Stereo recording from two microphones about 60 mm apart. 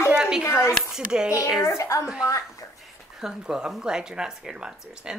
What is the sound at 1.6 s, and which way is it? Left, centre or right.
Speech, left.